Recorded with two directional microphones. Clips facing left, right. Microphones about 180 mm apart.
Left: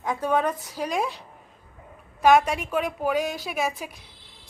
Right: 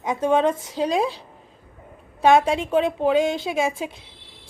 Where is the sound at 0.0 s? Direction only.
20° right (ahead or behind).